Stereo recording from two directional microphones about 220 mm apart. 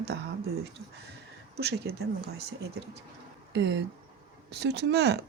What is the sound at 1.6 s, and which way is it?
Speech, 50° right (ahead or behind).